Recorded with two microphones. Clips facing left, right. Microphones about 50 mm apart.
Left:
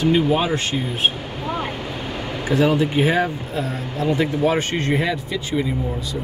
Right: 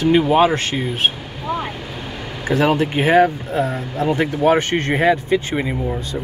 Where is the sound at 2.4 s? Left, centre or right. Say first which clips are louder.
Right 1 dB; right.